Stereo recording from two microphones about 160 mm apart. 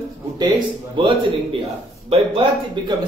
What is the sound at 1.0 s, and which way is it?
Speech, 30° right (ahead or behind).